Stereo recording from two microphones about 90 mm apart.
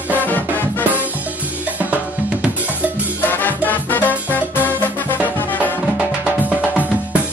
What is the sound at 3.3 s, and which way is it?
Music, 20° left (ahead or behind).